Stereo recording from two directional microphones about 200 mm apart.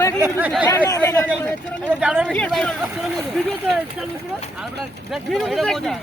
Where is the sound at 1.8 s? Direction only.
5° right (ahead or behind).